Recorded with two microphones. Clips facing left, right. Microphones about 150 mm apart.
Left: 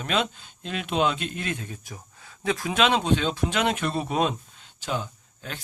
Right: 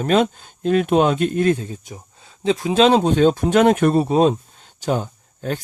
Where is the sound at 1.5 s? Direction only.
30° right (ahead or behind); by 4.0 s 50° right (ahead or behind).